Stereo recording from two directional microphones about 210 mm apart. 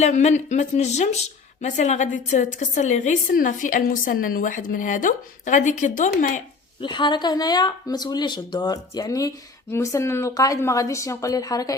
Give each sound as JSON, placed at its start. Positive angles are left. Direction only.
{"t": 0.0, "sound": "a woman's voice", "side_deg": 35}
{"t": 6.8, "sound": "a woman's voice", "side_deg": 20}